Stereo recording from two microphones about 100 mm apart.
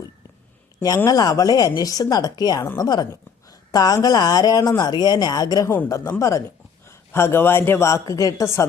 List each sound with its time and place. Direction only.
1.0 s speech: 40° left (ahead or behind)
5.6 s a man's voice: 25° left (ahead or behind)